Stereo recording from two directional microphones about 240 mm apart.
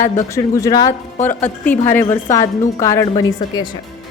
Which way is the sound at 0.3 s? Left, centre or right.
Centre.